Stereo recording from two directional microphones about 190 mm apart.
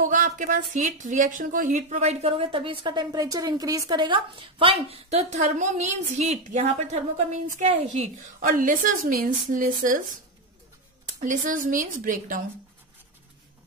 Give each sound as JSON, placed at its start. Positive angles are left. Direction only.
{"t": 0.0, "sound": "a woman's voice", "side_deg": -45}
{"t": 11.1, "sound": "a woman's voice", "side_deg": -45}